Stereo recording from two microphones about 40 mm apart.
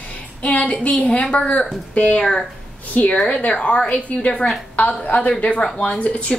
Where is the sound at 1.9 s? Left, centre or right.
Left.